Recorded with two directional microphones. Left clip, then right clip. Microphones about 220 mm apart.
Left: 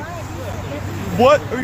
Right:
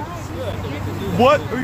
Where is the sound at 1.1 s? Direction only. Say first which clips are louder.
Left 2 dB; 5° left (ahead or behind).